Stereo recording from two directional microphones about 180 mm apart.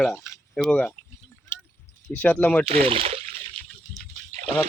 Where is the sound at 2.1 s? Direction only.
5° left (ahead or behind).